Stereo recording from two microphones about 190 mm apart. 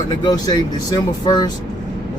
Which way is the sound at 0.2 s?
20° left (ahead or behind).